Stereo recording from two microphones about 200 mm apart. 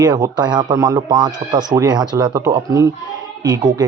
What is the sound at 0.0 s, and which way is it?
Speech, 20° right (ahead or behind).